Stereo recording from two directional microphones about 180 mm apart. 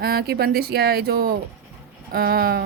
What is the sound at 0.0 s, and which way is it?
A woman's voice, 60° right (ahead or behind).